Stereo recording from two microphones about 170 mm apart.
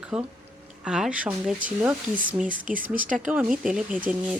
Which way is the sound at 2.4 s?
50° right (ahead or behind).